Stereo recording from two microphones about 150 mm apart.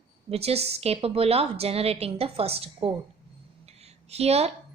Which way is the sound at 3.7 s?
45° right (ahead or behind).